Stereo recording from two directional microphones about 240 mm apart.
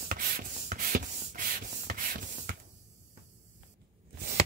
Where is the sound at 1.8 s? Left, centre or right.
Right.